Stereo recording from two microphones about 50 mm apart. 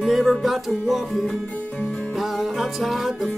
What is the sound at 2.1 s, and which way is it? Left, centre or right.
Music, centre.